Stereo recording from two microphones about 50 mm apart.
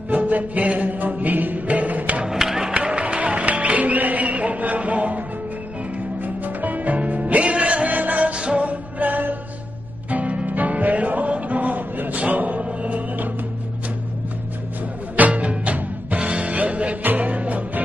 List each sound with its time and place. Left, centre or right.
0.1 s music: right
2.2 s music: centre; by 5.2 s right
6.2 s music: right
15.1 s music: right